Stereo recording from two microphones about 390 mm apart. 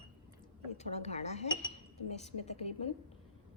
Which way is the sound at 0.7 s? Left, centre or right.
Centre.